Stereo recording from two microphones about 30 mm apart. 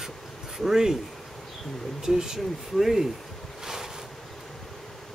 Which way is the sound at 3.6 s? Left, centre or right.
Centre.